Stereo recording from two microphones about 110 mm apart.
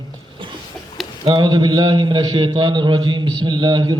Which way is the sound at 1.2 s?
45° right (ahead or behind).